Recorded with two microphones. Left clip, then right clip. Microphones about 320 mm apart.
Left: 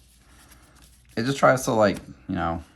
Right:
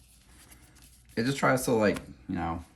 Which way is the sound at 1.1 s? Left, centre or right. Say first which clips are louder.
Left 7 dB; centre.